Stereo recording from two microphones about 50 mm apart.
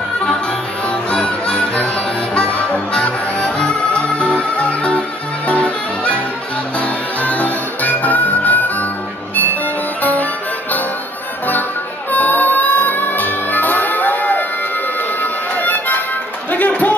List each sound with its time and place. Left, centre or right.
0.8 s music: centre; by 8.8 s left
12.1 s music: left
15.5 s music: left